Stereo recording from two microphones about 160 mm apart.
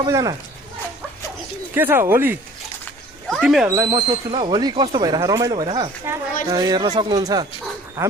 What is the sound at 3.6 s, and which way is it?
Speech, 25° right (ahead or behind).